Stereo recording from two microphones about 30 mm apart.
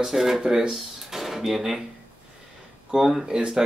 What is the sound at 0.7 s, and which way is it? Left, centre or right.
Drawer open or close, centre.